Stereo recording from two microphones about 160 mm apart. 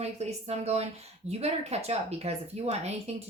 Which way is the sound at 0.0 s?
40° right (ahead or behind).